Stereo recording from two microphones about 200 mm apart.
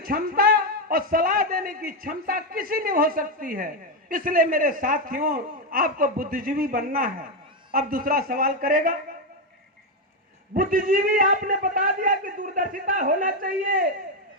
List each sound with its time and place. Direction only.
0.0 s a man's voice: 45° right (ahead or behind)
10.5 s a man's voice: 45° right (ahead or behind)